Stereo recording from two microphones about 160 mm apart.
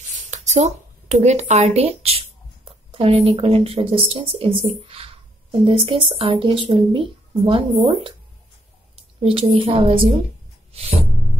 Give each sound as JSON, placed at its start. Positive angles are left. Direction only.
{"t": 0.3, "sound": "speech", "side_deg": -45}
{"t": 9.2, "sound": "speech", "side_deg": -35}